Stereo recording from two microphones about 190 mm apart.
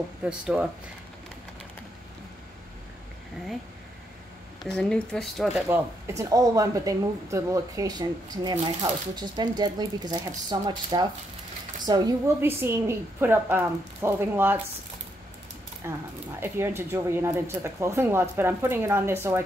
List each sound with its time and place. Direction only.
0.2 s speech: 5° right (ahead or behind)
4.6 s speech: 5° left (ahead or behind)
5.7 s speech: 15° right (ahead or behind)
15.8 s speech: 15° right (ahead or behind)